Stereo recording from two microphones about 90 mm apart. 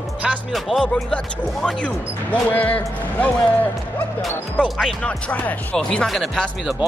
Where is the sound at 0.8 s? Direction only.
10° left (ahead or behind).